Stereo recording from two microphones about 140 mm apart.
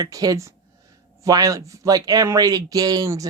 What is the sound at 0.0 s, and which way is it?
Speech, 25° right (ahead or behind).